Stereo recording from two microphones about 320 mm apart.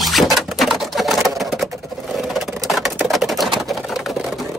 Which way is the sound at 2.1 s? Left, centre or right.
Centre.